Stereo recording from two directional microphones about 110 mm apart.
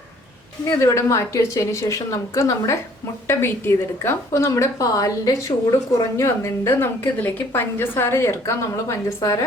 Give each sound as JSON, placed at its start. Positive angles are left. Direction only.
{"t": 0.8, "sound": "a woman's voice", "side_deg": 30}